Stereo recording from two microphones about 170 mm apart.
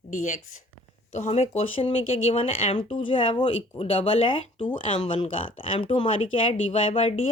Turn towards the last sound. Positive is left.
turn(degrees=35)  # may be behind; listen again after turning